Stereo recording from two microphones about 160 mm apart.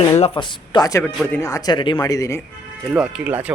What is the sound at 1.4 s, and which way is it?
Speech, 20° left (ahead or behind).